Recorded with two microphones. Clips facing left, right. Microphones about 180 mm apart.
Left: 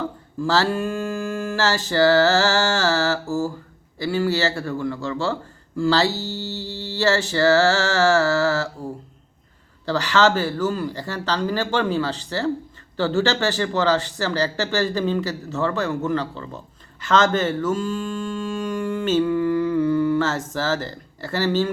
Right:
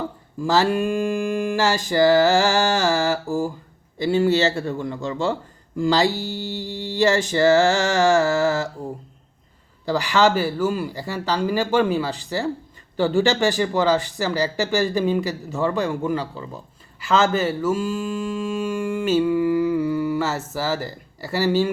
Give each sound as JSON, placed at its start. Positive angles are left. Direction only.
{"t": 0.3, "sound": "speech", "side_deg": -15}
{"t": 9.8, "sound": "speech", "side_deg": -10}